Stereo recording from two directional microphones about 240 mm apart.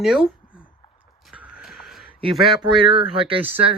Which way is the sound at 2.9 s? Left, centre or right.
Right.